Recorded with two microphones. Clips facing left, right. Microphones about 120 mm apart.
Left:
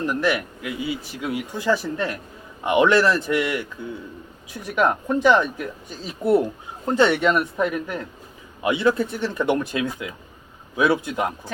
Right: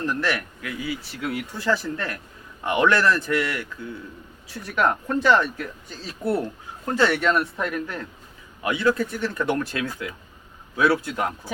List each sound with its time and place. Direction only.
0.0 s speech: 15° left (ahead or behind)